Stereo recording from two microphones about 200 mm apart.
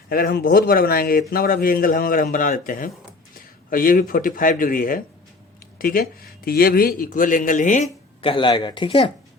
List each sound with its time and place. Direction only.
0.1 s speech: 50° left (ahead or behind)
8.2 s speech: 25° left (ahead or behind)